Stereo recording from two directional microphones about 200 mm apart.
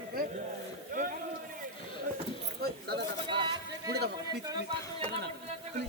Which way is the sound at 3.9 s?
55° right (ahead or behind).